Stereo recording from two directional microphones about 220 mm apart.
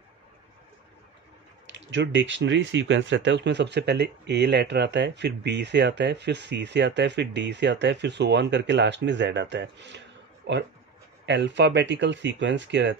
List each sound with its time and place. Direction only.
1.7 s speech: 55° right (ahead or behind)